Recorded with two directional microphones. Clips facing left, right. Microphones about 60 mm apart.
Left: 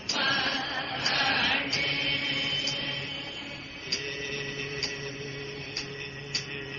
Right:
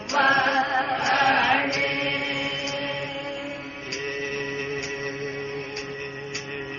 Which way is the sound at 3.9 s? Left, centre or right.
Right.